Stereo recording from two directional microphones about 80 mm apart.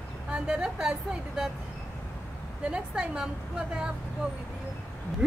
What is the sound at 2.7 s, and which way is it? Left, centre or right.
Speech, centre.